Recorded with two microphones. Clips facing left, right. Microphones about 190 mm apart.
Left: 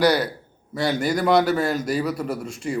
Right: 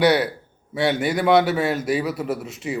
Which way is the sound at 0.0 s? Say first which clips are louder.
Right 1 dB; 5° right (ahead or behind).